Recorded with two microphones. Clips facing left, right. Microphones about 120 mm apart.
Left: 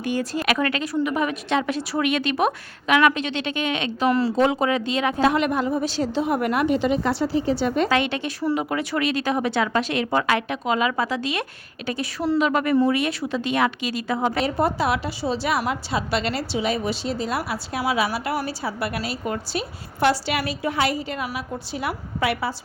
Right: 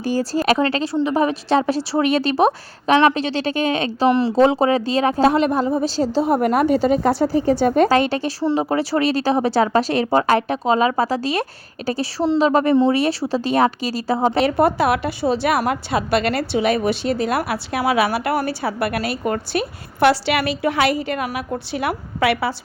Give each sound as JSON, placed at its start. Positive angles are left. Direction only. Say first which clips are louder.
{"t": 0.0, "sound": "a woman's voice", "louder": "right 5 dB", "side_deg": -35}
{"t": 14.3, "sound": "a woman's voice", "louder": "right 6 dB", "side_deg": -65}